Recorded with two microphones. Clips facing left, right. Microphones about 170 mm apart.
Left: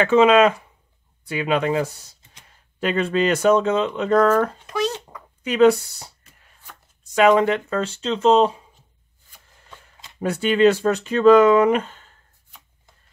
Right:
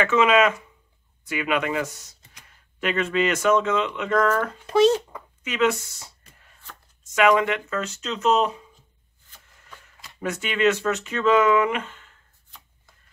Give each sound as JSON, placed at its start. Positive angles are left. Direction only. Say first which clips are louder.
{"t": 0.0, "sound": "speech", "louder": "left 4 dB", "side_deg": 30}
{"t": 4.6, "sound": "a sound", "louder": "right 7 dB", "side_deg": -30}
{"t": 5.4, "sound": "speech", "louder": "left 8 dB", "side_deg": 35}
{"t": 9.7, "sound": "speech", "louder": "left 1 dB", "side_deg": 25}